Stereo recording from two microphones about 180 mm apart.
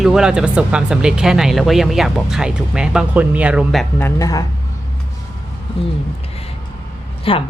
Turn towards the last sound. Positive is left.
turn(degrees=30)  # may be behind; listen again after turning